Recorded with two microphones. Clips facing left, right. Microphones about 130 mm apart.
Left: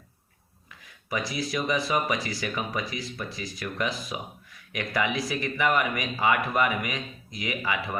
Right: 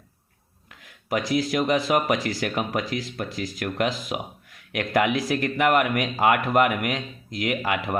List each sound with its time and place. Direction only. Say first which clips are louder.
0.9 s speech: right 6 dB; 70° right (ahead or behind)